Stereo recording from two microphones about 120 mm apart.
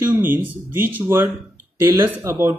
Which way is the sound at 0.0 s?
15° right (ahead or behind).